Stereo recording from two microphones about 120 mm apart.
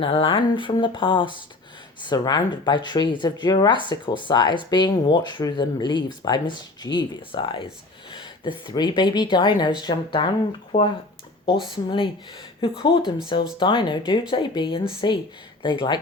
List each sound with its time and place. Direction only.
0.0 s speech: 50° left (ahead or behind)
10.7 s speech: 55° left (ahead or behind)
11.4 s speech: 45° left (ahead or behind)